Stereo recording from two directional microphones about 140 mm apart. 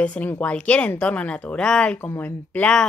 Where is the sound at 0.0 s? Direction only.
10° left (ahead or behind).